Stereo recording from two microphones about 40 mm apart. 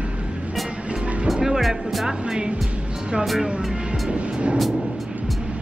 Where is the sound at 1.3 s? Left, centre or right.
Centre.